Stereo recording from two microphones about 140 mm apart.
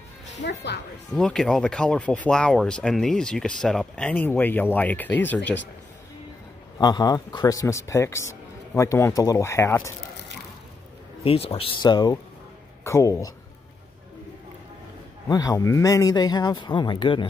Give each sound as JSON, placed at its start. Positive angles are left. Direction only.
{"t": 1.1, "sound": "speech", "side_deg": 5}
{"t": 6.8, "sound": "speech", "side_deg": 30}
{"t": 11.2, "sound": "speech", "side_deg": 45}
{"t": 15.2, "sound": "speech", "side_deg": 25}